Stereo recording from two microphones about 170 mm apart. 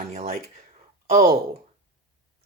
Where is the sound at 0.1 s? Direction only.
40° right (ahead or behind).